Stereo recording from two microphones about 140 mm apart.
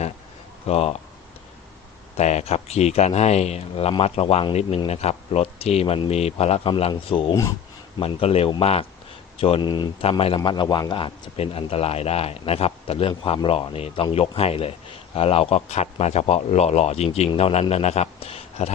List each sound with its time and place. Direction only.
0.6 s speech: 45° left (ahead or behind)
2.1 s speech: 50° left (ahead or behind)